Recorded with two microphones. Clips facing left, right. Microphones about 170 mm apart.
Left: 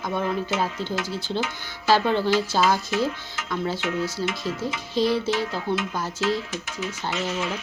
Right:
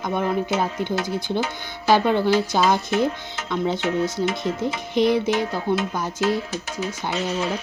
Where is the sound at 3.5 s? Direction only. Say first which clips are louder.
Right 4 dB; 20° right (ahead or behind).